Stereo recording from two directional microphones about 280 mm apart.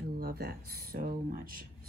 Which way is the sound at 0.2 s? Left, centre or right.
Right.